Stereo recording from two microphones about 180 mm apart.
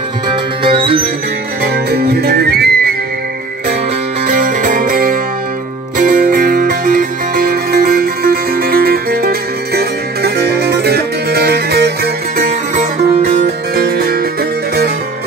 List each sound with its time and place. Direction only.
0.7 s music: 30° right (ahead or behind)
1.9 s music: 60° right (ahead or behind)
4.3 s music: 50° right (ahead or behind)